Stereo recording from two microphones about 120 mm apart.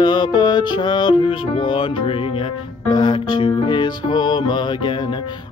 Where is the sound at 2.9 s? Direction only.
40° left (ahead or behind).